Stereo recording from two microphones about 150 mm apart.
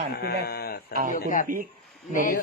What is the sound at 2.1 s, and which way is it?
Speech, 60° left (ahead or behind).